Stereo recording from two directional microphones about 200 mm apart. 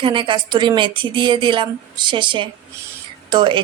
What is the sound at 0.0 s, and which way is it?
Speech, 25° right (ahead or behind).